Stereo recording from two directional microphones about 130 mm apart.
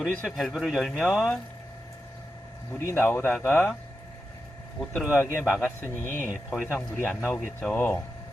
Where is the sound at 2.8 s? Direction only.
15° left (ahead or behind).